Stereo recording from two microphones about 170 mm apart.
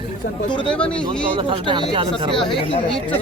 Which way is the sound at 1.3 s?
30° right (ahead or behind).